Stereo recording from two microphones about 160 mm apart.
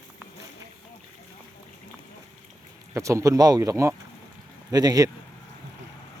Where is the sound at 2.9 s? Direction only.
20° right (ahead or behind).